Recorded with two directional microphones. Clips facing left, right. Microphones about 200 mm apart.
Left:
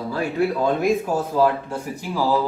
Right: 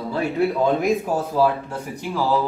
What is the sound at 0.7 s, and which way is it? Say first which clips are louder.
Speech: even; centre (ahead or behind).